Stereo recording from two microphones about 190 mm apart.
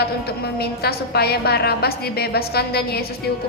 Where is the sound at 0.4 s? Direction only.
55° left (ahead or behind).